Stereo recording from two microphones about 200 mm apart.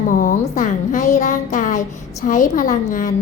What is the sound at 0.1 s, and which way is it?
Speech, 40° left (ahead or behind).